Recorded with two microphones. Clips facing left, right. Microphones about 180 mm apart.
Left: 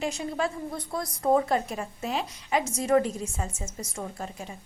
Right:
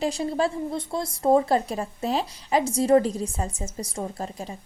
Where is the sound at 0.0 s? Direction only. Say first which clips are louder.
Right 5 dB; 35° right (ahead or behind).